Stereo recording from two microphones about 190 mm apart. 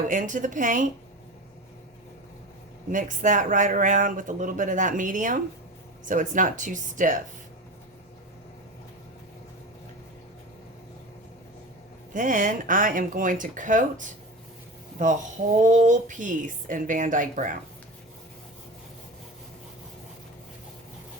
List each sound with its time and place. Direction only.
0.1 s speech: 40° right (ahead or behind)
2.9 s speech: 45° right (ahead or behind)
12.1 s speech: 45° right (ahead or behind)
15.0 s speech: 40° right (ahead or behind)